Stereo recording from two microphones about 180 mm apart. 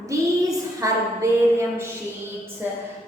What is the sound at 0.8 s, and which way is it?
A woman's voice, 15° right (ahead or behind).